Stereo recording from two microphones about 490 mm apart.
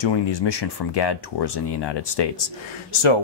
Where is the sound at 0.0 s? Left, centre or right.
Left.